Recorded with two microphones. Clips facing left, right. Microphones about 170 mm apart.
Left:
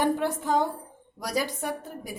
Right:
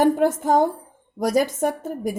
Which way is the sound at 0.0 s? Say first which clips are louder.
Right 7 dB; 45° right (ahead or behind).